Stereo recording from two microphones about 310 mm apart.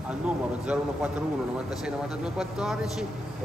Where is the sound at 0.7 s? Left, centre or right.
Centre.